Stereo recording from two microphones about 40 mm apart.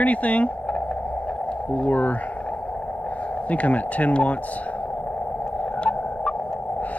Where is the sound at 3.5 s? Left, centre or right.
Left.